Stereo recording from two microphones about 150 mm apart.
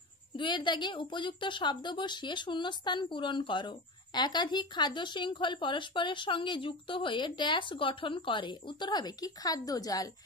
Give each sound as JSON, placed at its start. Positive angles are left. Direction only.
{"t": 0.4, "sound": "a woman's voice", "side_deg": 30}